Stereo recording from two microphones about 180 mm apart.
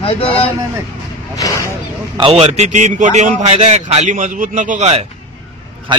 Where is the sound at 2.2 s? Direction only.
35° right (ahead or behind).